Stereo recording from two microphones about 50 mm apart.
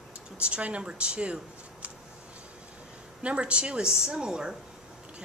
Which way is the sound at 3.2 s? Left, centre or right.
Right.